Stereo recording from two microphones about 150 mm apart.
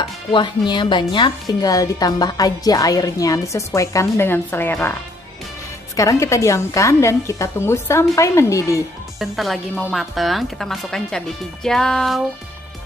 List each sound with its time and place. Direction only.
0.3 s speech: 30° left (ahead or behind); by 4.9 s 15° left (ahead or behind)
5.9 s speech: 20° left (ahead or behind)
9.2 s speech: centre (ahead or behind)